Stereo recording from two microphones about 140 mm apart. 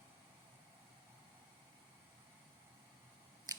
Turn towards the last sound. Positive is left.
turn(degrees=-25)  # may be behind; listen again after turning